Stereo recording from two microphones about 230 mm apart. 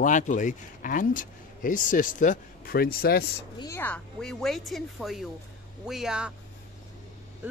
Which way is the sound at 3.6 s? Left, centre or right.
Centre.